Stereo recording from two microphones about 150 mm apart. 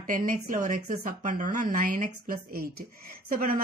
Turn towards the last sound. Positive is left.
turn(degrees=-70)  # may be behind; listen again after turning